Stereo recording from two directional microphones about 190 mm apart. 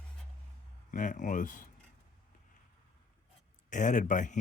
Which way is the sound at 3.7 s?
40° left (ahead or behind).